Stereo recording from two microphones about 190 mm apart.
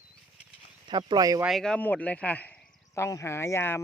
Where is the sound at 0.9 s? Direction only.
25° right (ahead or behind).